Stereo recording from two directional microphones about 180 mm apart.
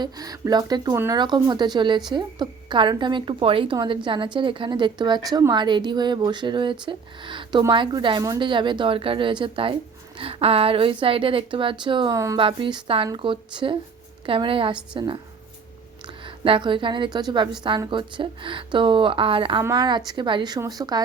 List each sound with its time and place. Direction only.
0.0 s a woman's voice: 20° right (ahead or behind)
12.4 s a woman's voice: 30° right (ahead or behind)
16.2 s a woman's voice: 30° right (ahead or behind)